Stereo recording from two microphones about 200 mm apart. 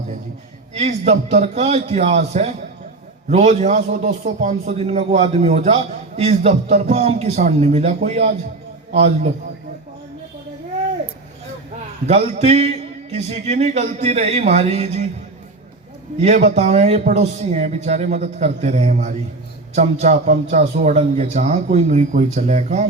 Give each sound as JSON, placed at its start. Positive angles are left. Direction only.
{"t": 0.7, "sound": "a man's voice", "side_deg": -35}
{"t": 12.0, "sound": "a man's voice", "side_deg": -30}
{"t": 16.2, "sound": "a man's voice", "side_deg": -35}